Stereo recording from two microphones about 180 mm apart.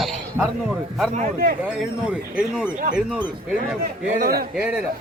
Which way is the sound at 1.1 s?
50° right (ahead or behind).